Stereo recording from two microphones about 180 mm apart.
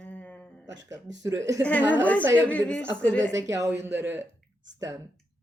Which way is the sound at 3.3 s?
15° right (ahead or behind).